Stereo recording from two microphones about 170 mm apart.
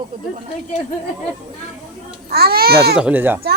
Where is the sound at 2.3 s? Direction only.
65° right (ahead or behind).